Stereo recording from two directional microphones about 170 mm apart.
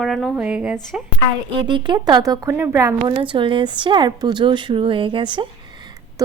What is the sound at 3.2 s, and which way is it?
A woman's voice, 30° right (ahead or behind).